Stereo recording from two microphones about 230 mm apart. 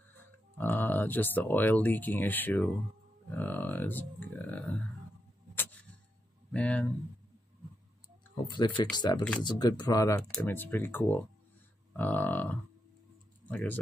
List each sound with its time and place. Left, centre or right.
0.6 s speech: centre
5.5 s a sound: centre
6.5 s speech: centre
8.5 s speech: left